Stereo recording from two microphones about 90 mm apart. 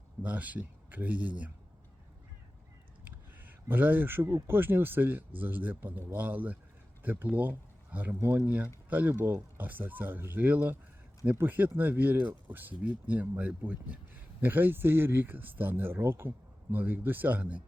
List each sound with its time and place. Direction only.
0.2 s speech: 15° right (ahead or behind)
3.0 s a sound: 20° right (ahead or behind)
4.4 s speech: 25° right (ahead or behind)